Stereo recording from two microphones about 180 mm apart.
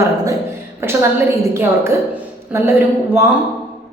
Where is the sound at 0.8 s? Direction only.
15° right (ahead or behind).